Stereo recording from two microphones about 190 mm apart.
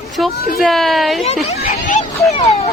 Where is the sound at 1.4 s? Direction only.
35° left (ahead or behind).